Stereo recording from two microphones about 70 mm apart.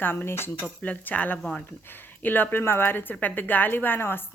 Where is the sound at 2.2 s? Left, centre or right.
Left.